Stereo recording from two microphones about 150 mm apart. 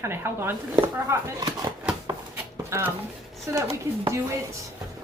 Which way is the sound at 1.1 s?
25° right (ahead or behind).